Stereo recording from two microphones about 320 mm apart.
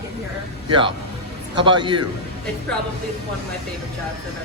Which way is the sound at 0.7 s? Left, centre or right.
Centre.